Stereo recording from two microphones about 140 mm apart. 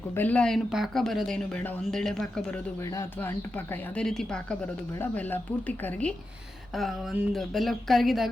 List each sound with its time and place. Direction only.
0.1 s speech: 10° left (ahead or behind)
2.8 s speech: 20° left (ahead or behind)
6.7 s speech: centre (ahead or behind)